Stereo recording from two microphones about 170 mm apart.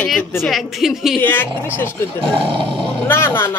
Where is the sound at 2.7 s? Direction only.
10° left (ahead or behind).